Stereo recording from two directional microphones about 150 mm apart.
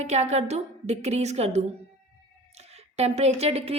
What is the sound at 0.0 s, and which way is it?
A woman's voice, 50° right (ahead or behind).